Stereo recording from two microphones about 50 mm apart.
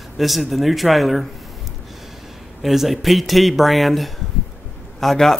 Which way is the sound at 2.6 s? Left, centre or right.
Centre.